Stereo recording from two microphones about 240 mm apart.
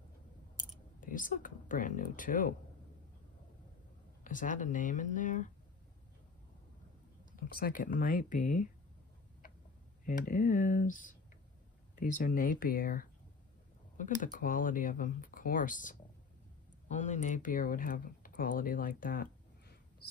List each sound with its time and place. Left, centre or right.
1.0 s speech: left
4.2 s speech: left
7.3 s speech: left
10.0 s speech: left